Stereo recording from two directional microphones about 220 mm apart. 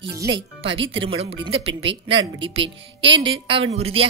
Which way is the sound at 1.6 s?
60° right (ahead or behind).